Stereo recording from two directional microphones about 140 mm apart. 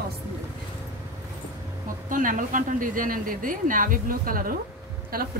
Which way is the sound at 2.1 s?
70° right (ahead or behind).